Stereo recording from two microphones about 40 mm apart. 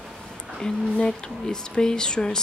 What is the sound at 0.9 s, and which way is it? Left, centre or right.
Speech, centre.